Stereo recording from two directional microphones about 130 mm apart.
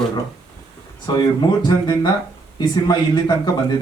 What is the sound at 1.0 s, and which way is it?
Speech, 35° left (ahead or behind).